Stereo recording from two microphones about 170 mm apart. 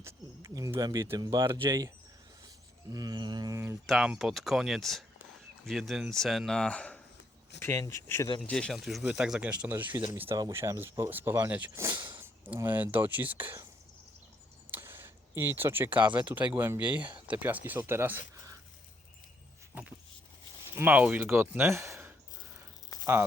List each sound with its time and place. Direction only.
0.0 s speech: 20° right (ahead or behind)
2.9 s speech: 25° right (ahead or behind)
3.8 s speech: 5° right (ahead or behind)
14.7 s speech: 15° right (ahead or behind)
20.7 s speech: 10° right (ahead or behind)